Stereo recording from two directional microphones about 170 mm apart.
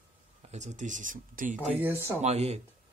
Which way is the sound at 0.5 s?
45° right (ahead or behind).